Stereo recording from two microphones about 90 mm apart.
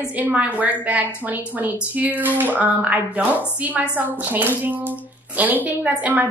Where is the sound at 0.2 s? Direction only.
15° right (ahead or behind).